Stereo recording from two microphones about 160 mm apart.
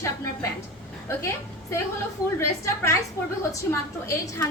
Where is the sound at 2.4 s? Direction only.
15° left (ahead or behind).